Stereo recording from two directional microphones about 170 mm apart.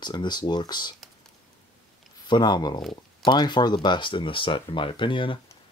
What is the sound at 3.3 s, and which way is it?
Speech, 25° left (ahead or behind).